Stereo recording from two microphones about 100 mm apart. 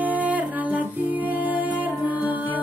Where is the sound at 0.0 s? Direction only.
15° right (ahead or behind).